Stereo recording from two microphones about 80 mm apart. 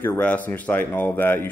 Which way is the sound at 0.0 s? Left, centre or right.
Left.